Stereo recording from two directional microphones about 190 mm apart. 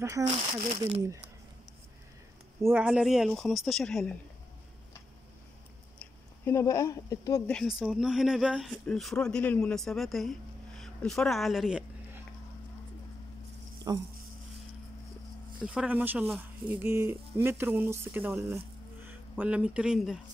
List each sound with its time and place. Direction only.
0.3 s speech: 30° right (ahead or behind)
2.6 s speech: 10° right (ahead or behind)
6.4 s speech: 15° left (ahead or behind)
7.4 s speech: centre (ahead or behind)
10.8 s a sound: centre (ahead or behind)
13.9 s speech: 20° right (ahead or behind)
15.6 s speech: 5° right (ahead or behind)